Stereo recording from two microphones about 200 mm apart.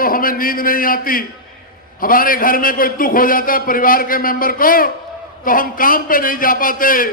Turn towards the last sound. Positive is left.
turn(degrees=45)  # may be behind; listen again after turning